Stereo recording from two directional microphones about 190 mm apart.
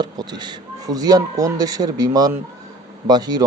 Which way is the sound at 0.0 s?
20° right (ahead or behind).